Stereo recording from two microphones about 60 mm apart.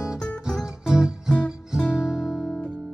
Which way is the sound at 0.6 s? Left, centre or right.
Centre.